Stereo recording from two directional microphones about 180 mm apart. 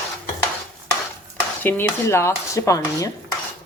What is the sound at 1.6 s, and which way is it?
Speech, 10° left (ahead or behind).